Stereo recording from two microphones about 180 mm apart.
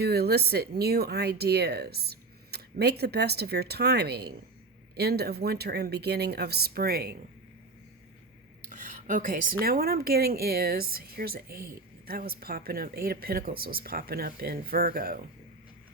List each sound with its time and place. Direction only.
0.0 s a woman's voice: 65° right (ahead or behind)
8.7 s a woman's voice: 45° right (ahead or behind)